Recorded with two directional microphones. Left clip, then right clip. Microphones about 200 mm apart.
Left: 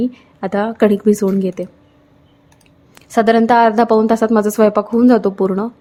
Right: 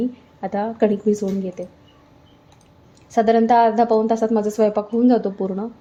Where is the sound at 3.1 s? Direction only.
25° left (ahead or behind).